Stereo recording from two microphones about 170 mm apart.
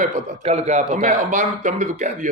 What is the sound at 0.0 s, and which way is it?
Speech, 40° right (ahead or behind).